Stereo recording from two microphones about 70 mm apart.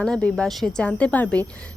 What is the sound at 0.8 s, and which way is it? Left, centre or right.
Speech, centre.